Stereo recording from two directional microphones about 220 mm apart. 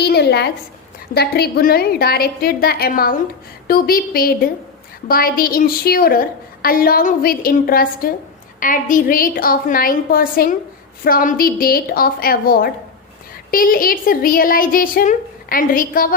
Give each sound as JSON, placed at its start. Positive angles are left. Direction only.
{"t": 0.0, "sound": "a woman's voice", "side_deg": 45}